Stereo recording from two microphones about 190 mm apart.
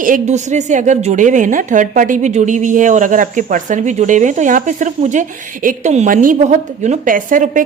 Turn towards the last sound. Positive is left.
turn(degrees=-45)  # may be behind; listen again after turning